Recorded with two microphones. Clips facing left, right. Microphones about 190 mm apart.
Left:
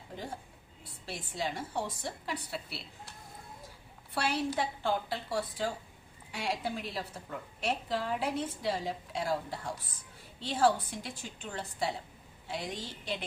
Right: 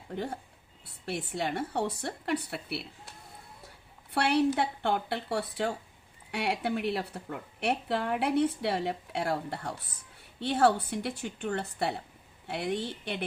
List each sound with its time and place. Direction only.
1.0 s a woman's voice: 60° right (ahead or behind)
4.1 s a woman's voice: 65° right (ahead or behind)